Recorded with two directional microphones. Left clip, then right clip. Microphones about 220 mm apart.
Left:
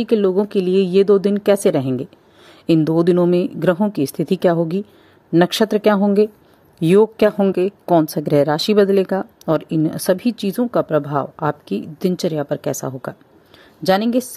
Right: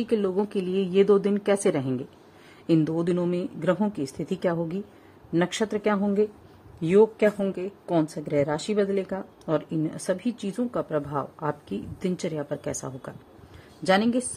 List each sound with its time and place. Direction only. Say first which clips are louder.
0.0 s speech: left 9 dB; 25° left (ahead or behind)